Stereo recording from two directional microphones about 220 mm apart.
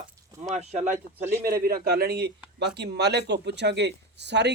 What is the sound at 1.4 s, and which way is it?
A man's voice, 45° right (ahead or behind).